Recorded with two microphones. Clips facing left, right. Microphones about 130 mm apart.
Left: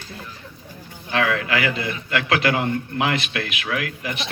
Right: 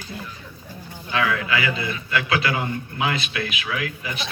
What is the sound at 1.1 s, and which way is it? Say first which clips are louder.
A man's voice: left 1 dB; 60° left (ahead or behind).